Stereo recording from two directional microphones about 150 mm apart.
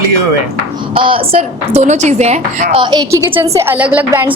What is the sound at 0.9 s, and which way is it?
A woman's voice, 35° right (ahead or behind).